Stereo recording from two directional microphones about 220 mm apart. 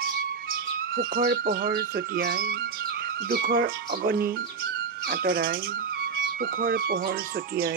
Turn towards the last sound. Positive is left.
turn(degrees=-40)  # may be behind; listen again after turning